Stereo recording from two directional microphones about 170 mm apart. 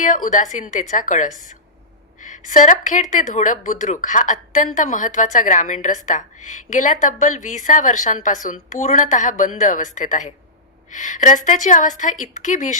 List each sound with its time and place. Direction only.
0.0 s a woman's voice: 50° left (ahead or behind)